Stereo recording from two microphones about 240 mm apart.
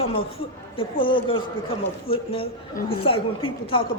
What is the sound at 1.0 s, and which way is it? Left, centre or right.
A woman's voice, left.